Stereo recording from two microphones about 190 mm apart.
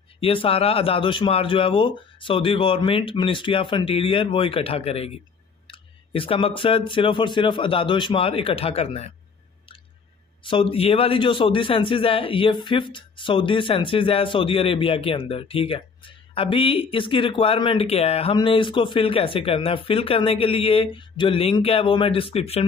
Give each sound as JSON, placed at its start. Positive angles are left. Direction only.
{"t": 0.2, "sound": "a man's voice", "side_deg": 30}
{"t": 10.4, "sound": "a man's voice", "side_deg": 30}